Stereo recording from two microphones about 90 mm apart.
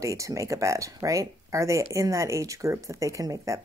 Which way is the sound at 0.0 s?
35° right (ahead or behind).